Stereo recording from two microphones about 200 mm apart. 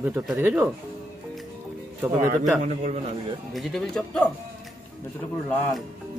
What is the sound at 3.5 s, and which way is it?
Speech, centre (ahead or behind).